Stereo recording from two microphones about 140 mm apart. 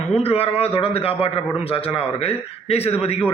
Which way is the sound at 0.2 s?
45° left (ahead or behind).